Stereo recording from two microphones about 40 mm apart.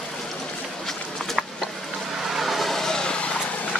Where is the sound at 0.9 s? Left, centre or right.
Centre.